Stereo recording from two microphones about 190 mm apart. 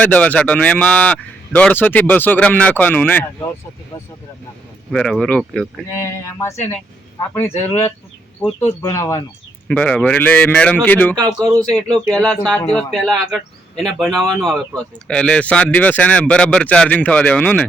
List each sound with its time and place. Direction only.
0.0 s speech: 5° left (ahead or behind)
4.9 s speech: 5° left (ahead or behind)
7.3 s speech: 10° left (ahead or behind)
11.3 s speech: 20° right (ahead or behind)
12.0 s speech: 5° left (ahead or behind)